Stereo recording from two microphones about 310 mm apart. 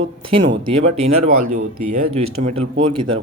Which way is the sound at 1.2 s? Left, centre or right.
Right.